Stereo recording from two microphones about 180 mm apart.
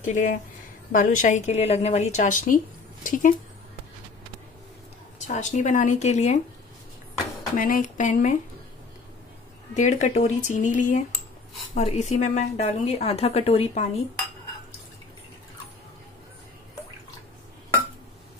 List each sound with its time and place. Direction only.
0.0 s a woman's voice: 45° left (ahead or behind)
5.2 s a woman's voice: 40° left (ahead or behind)
7.5 s a woman's voice: 50° left (ahead or behind)
9.8 s a woman's voice: 40° left (ahead or behind)